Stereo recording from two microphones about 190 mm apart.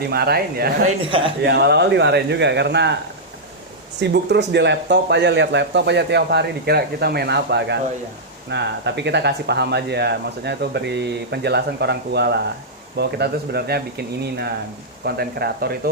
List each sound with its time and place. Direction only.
0.1 s speech: 55° right (ahead or behind)
4.0 s speech: 65° right (ahead or behind)